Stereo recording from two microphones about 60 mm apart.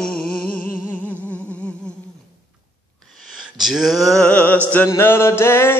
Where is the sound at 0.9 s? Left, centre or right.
Left.